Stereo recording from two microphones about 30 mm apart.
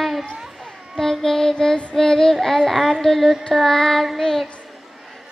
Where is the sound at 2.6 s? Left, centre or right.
Centre.